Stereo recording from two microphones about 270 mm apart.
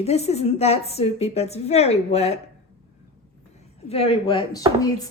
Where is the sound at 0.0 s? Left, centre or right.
Left.